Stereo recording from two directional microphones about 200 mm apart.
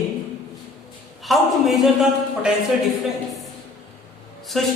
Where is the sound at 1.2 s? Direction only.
Centre (ahead or behind).